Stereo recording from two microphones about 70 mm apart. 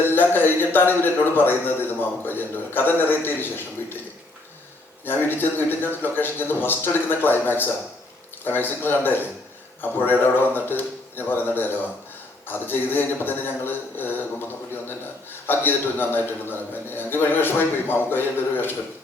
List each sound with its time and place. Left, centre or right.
0.0 s a man's voice: left
5.0 s a man's voice: left